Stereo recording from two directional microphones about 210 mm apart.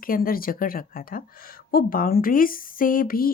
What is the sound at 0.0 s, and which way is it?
A woman's voice, 45° left (ahead or behind).